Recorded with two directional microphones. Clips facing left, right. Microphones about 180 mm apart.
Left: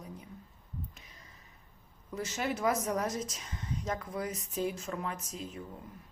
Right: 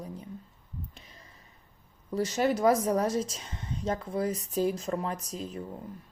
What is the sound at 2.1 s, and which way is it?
A woman's voice, 35° right (ahead or behind).